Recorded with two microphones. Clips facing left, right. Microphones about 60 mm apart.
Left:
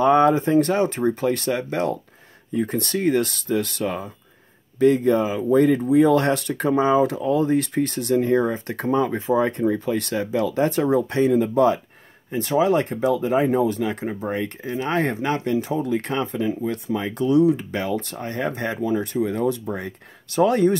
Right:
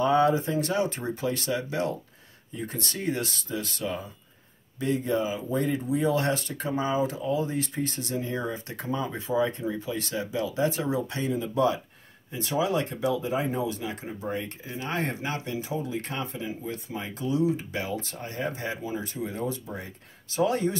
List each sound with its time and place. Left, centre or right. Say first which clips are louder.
0.0 s speech: left 6 dB; left